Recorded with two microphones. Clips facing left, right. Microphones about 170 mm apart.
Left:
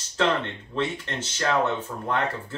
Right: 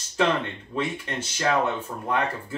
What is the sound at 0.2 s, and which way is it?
Speech, 15° right (ahead or behind).